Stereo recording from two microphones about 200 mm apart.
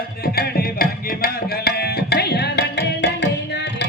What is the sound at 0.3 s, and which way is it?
Music, 50° left (ahead or behind).